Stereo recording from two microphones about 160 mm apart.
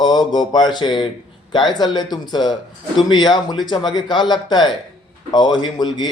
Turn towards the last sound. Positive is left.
turn(degrees=25)  # may be behind; listen again after turning